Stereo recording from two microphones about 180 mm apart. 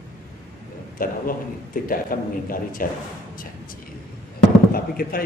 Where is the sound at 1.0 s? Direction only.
50° left (ahead or behind).